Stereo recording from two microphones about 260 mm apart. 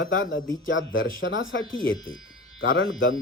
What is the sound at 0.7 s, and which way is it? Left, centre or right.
Speech, left.